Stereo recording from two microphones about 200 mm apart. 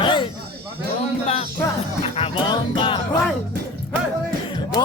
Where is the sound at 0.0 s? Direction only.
25° left (ahead or behind).